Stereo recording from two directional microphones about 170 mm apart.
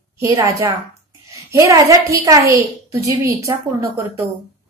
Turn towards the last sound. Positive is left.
turn(degrees=-20)  # may be behind; listen again after turning